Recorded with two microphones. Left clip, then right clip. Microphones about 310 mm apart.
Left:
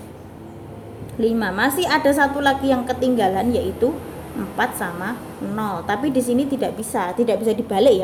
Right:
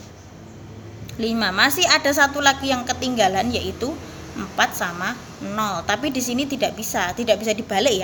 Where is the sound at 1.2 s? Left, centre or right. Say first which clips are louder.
Right 1 dB; centre.